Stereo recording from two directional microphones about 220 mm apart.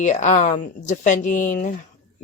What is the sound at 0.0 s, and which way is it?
Speech, 35° left (ahead or behind).